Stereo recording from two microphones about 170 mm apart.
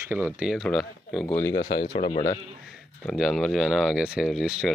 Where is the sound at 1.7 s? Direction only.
65° left (ahead or behind).